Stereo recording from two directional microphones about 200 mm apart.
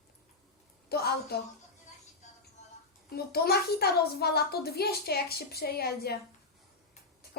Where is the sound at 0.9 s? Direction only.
50° left (ahead or behind).